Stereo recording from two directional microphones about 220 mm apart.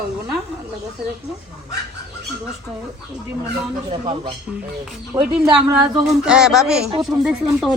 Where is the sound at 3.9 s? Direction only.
25° right (ahead or behind).